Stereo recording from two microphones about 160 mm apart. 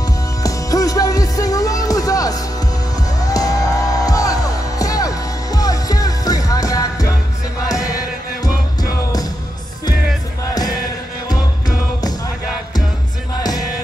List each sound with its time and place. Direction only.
0.4 s music: 20° left (ahead or behind)
13.4 s music: 25° left (ahead or behind)